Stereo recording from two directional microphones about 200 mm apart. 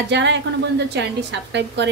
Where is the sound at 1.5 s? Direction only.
60° right (ahead or behind).